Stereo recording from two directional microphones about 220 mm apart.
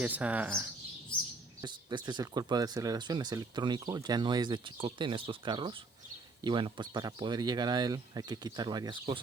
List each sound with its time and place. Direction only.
0.0 s speech: 5° right (ahead or behind)
1.6 s speech: 20° right (ahead or behind)